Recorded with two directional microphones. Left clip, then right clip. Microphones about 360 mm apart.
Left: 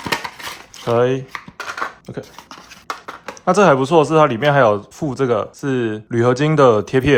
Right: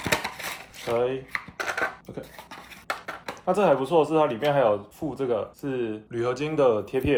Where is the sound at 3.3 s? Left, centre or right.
Left.